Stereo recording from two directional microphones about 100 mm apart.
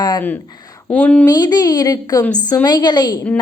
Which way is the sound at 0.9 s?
15° left (ahead or behind).